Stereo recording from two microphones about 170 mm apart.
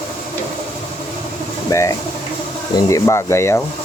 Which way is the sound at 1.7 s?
20° left (ahead or behind).